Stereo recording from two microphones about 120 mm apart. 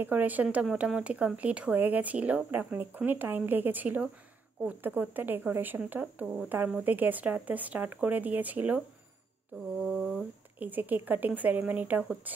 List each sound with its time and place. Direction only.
0.0 s speech: 15° right (ahead or behind)
9.8 s speech: 5° right (ahead or behind)
10.6 s speech: 15° right (ahead or behind)